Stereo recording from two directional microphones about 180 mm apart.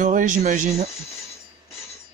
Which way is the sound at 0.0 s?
45° right (ahead or behind).